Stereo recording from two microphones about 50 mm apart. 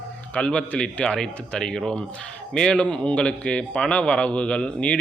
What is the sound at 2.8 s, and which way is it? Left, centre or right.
A man's voice, left.